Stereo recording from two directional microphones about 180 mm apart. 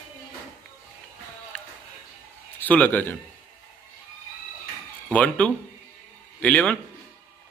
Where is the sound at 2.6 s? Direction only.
10° left (ahead or behind).